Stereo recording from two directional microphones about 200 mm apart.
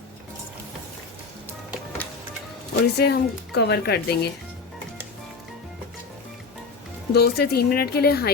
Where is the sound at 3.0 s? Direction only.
55° left (ahead or behind).